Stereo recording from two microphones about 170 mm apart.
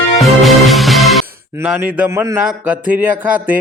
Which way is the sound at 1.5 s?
10° right (ahead or behind).